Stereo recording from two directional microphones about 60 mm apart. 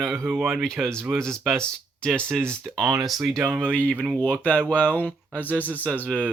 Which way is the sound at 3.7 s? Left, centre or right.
Left.